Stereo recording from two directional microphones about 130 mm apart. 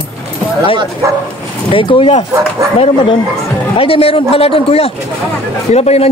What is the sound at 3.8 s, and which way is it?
A man's voice, 45° left (ahead or behind).